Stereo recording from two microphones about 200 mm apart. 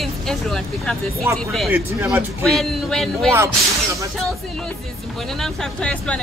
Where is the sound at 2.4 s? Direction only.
Centre (ahead or behind).